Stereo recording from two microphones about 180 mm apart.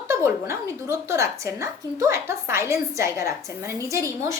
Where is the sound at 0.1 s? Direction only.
15° right (ahead or behind).